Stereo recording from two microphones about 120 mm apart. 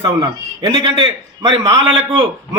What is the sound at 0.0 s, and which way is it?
A man's voice, 35° right (ahead or behind).